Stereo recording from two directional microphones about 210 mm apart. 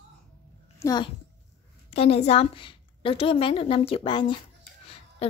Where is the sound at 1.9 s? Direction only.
30° left (ahead or behind).